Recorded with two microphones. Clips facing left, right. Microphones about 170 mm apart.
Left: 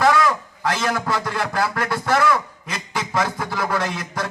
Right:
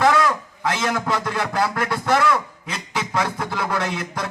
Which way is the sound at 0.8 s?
5° left (ahead or behind).